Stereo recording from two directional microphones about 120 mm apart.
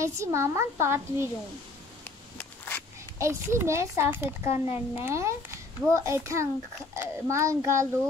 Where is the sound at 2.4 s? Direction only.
15° left (ahead or behind).